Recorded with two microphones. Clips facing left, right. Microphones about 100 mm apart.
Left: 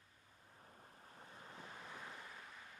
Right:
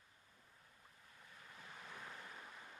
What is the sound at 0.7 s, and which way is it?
Waves, 45° left (ahead or behind).